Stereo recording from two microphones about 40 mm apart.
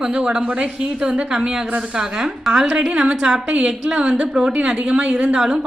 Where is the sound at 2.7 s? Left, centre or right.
Right.